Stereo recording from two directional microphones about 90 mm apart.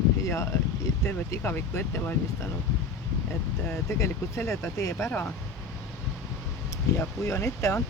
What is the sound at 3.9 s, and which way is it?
Speech, 35° left (ahead or behind).